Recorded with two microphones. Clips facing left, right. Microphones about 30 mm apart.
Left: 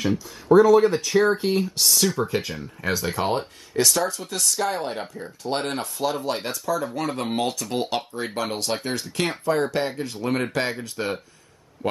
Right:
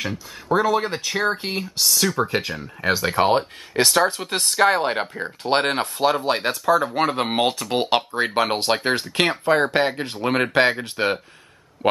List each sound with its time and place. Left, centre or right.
0.5 s speech: right
1.8 s speech: centre
2.1 s speech: right